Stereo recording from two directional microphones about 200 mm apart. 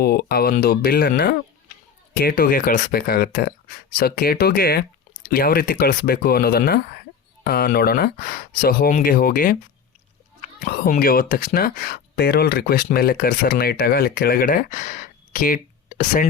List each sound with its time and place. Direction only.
0.0 s speech: 50° left (ahead or behind)